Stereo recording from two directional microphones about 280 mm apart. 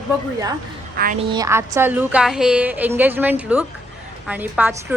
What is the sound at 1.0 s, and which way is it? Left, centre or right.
Speech, right.